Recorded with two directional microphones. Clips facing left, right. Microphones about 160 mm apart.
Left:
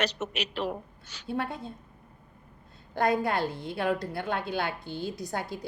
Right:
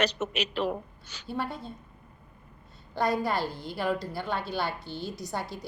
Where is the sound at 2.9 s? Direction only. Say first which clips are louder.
Left 1 dB; 60° left (ahead or behind).